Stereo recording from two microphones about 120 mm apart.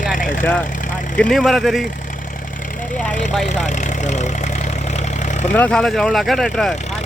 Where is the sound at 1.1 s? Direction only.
5° left (ahead or behind).